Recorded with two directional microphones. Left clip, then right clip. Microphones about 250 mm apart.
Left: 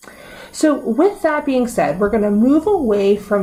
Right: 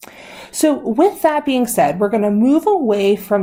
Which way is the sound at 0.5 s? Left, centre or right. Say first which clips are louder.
Right 1 dB; right.